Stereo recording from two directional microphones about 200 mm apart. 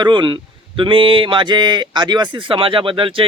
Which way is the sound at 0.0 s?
25° right (ahead or behind).